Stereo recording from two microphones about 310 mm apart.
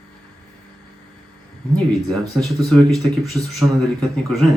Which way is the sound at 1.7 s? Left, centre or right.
Centre.